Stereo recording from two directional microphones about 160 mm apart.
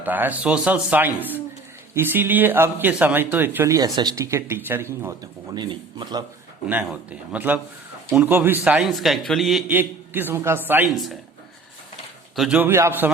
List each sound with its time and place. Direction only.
0.0 s speech: 10° right (ahead or behind)
5.5 s a man's voice: 30° right (ahead or behind)
6.7 s a man's voice: 10° right (ahead or behind)
9.7 s speech: 10° right (ahead or behind)
10.8 s a man's voice: centre (ahead or behind)
12.4 s speech: 10° right (ahead or behind)